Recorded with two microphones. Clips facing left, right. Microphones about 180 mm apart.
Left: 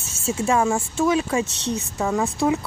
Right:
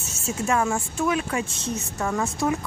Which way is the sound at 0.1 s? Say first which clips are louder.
Left 3 dB; 30° left (ahead or behind).